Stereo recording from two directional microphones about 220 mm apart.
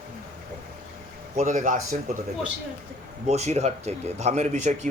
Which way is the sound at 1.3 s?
35° right (ahead or behind).